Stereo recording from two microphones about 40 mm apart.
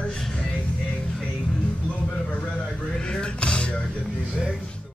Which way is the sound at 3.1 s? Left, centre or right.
Left.